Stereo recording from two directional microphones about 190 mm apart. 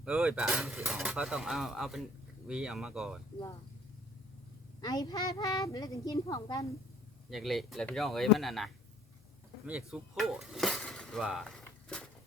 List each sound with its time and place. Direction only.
0.0 s speech: 5° right (ahead or behind)
4.8 s a woman's voice: 20° left (ahead or behind)
7.3 s speech: centre (ahead or behind)
11.6 s a sound: 5° left (ahead or behind)